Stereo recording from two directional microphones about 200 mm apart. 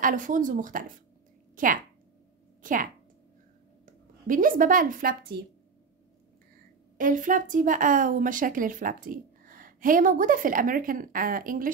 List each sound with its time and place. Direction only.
0.0 s a woman's voice: 40° right (ahead or behind)
7.0 s speech: 40° right (ahead or behind)